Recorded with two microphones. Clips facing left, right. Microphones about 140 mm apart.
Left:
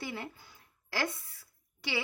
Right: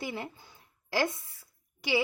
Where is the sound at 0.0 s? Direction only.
15° right (ahead or behind).